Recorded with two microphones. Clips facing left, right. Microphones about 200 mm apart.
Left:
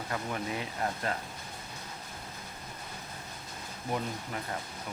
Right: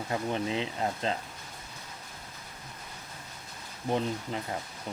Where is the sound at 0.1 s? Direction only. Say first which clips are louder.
Right 5 dB; 25° right (ahead or behind).